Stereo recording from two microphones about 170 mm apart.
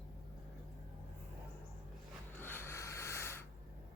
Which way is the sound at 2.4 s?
15° left (ahead or behind).